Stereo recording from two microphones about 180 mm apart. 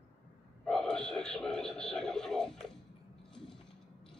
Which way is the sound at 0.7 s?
5° left (ahead or behind).